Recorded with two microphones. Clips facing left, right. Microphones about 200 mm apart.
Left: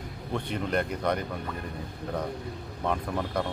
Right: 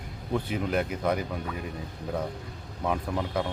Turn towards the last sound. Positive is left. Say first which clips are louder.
# right 1 dB
turn(degrees=-5)  # may be behind; listen again after turning